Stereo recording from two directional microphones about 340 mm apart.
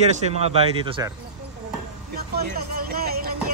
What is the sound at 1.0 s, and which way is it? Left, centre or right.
Speech, centre.